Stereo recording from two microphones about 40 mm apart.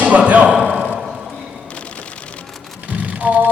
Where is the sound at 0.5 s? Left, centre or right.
Centre.